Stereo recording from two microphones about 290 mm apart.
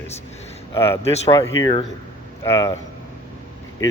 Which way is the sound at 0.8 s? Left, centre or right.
Centre.